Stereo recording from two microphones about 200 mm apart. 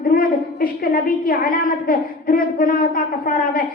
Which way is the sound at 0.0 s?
45° left (ahead or behind).